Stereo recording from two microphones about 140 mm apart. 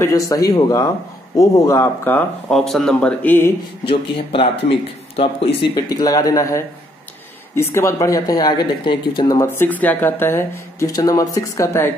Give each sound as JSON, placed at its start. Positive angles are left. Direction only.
{"t": 0.0, "sound": "speech", "side_deg": 25}
{"t": 2.5, "sound": "speech", "side_deg": 0}
{"t": 3.8, "sound": "speech", "side_deg": 40}
{"t": 5.8, "sound": "speech", "side_deg": 25}
{"t": 9.4, "sound": "speech", "side_deg": 15}